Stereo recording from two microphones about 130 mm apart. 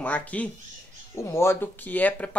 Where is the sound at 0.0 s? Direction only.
10° left (ahead or behind).